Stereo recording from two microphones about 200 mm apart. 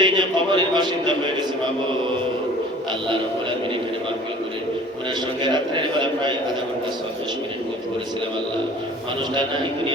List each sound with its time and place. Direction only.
0.0 s a man's voice: 20° right (ahead or behind)
5.4 s a man's voice: 25° right (ahead or behind)